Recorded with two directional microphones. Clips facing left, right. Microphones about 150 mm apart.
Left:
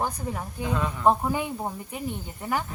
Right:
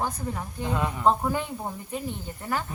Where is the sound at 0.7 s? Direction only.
15° right (ahead or behind).